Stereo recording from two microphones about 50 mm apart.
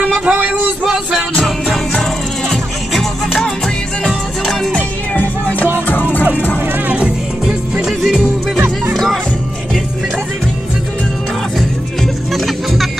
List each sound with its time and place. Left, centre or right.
0.2 s a sound: right
0.8 s music: centre
2.5 s music: centre
5.1 s music: left
7.4 s music: centre
8.5 s music: right
8.9 s music: centre
12.3 s music: centre